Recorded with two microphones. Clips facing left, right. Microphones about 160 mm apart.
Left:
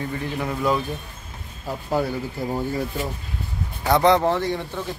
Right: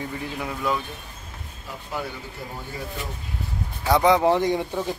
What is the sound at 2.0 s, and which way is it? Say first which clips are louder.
Speech: left 7 dB; 40° left (ahead or behind).